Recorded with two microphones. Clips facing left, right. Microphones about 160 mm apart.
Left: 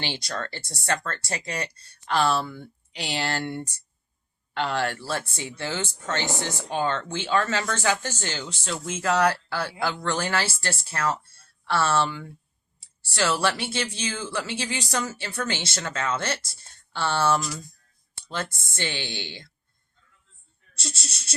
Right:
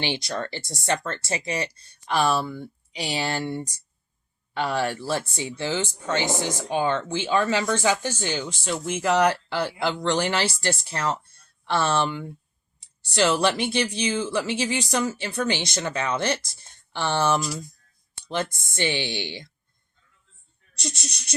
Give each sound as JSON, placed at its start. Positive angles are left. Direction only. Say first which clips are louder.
{"t": 0.0, "sound": "speech", "louder": "right 4 dB", "side_deg": -15}
{"t": 4.5, "sound": "speech", "louder": "right 1 dB", "side_deg": -10}
{"t": 20.7, "sound": "speech", "louder": "right 4 dB", "side_deg": -15}